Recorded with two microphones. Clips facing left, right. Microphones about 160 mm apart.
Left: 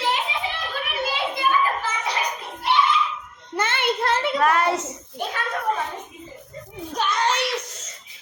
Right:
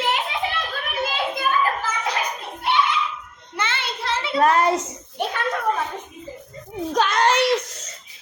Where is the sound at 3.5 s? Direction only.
50° left (ahead or behind).